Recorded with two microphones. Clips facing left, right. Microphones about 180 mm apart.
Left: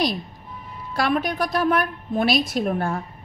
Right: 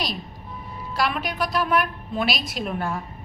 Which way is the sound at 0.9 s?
50° left (ahead or behind).